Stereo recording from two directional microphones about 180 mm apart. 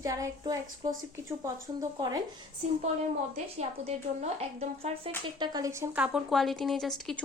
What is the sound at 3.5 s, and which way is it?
A woman's voice, 35° right (ahead or behind).